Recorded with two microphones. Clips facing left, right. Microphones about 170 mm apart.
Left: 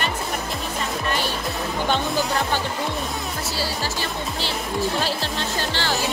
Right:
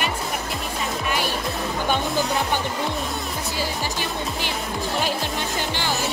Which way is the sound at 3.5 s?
15° right (ahead or behind).